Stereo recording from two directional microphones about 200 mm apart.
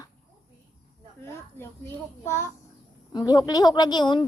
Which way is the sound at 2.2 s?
15° left (ahead or behind).